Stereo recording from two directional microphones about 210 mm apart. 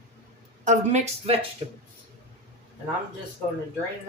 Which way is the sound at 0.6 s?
35° right (ahead or behind).